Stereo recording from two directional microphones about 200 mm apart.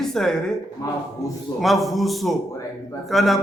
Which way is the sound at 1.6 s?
Centre (ahead or behind).